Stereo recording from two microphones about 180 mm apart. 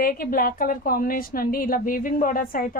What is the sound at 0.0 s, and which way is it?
A woman's voice, 55° left (ahead or behind).